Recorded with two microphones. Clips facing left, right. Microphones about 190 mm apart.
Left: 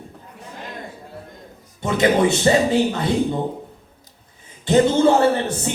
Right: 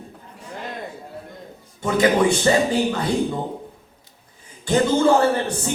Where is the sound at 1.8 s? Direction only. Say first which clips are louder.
Even; 25° left (ahead or behind).